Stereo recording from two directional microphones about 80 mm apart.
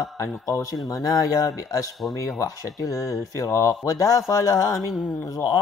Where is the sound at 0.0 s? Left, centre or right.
Left.